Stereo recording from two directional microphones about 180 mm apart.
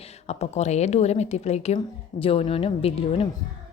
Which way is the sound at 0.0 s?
35° left (ahead or behind).